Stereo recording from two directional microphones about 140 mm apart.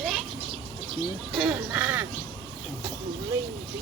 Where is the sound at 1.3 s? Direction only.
5° right (ahead or behind).